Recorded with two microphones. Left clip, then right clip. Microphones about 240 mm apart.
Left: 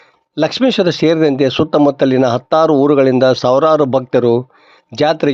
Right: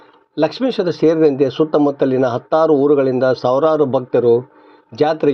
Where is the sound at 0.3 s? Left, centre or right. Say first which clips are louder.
Left 4 dB; left.